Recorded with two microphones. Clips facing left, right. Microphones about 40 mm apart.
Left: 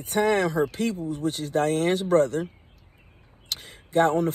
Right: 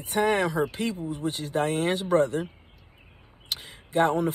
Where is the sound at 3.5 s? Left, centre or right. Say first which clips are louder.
Left 1 dB; right.